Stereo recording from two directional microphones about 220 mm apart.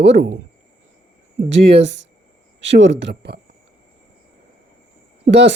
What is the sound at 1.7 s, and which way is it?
Speech, 50° right (ahead or behind).